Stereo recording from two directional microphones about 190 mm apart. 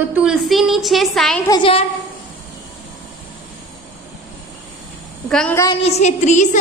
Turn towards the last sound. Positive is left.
turn(degrees=40)  # may be behind; listen again after turning